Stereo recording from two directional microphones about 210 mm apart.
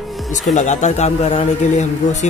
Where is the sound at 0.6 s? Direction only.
35° left (ahead or behind).